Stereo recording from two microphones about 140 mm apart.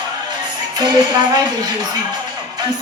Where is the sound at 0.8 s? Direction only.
30° right (ahead or behind).